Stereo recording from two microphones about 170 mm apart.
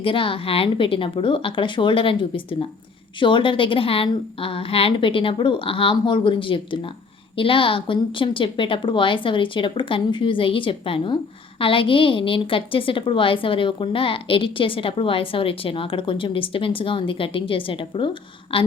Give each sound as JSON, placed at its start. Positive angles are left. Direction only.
{"t": 0.0, "sound": "a woman's voice", "side_deg": 30}